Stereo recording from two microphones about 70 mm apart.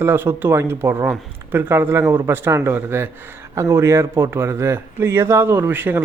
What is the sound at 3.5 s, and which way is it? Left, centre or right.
Speech, right.